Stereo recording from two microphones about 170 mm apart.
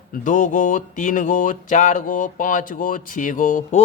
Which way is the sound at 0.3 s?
50° left (ahead or behind).